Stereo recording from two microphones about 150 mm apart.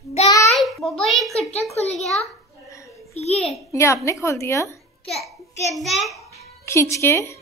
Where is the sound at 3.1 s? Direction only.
45° left (ahead or behind).